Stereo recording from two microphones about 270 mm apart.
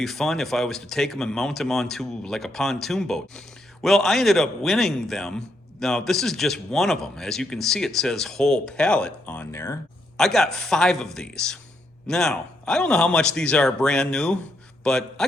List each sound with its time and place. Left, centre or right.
0.0 s speech: centre